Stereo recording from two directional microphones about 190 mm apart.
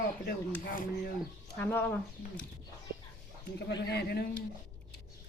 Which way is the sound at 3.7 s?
65° left (ahead or behind).